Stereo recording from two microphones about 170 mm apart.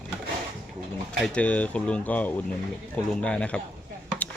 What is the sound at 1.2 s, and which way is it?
Speech, 5° left (ahead or behind).